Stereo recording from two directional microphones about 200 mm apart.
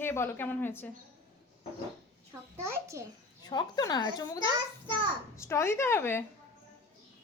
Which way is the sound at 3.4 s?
20° left (ahead or behind).